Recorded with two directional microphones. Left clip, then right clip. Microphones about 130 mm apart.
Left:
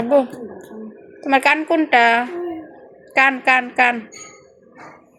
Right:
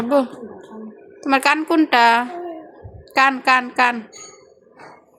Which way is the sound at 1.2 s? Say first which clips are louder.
Left 1 dB; 35° right (ahead or behind).